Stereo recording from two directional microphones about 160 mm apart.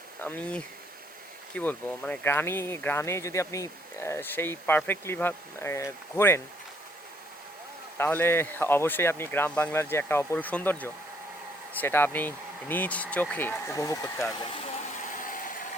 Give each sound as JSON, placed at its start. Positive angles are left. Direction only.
{"t": 0.2, "sound": "speech", "side_deg": 10}
{"t": 7.9, "sound": "speech", "side_deg": 15}
{"t": 15.0, "sound": "a sound", "side_deg": 55}